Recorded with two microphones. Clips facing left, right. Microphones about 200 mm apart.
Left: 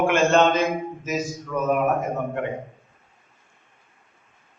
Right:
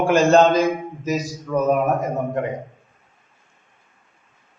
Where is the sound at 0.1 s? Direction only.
35° right (ahead or behind).